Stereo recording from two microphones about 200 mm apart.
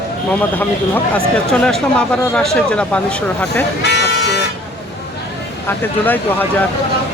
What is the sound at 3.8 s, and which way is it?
Vehicle, 55° left (ahead or behind).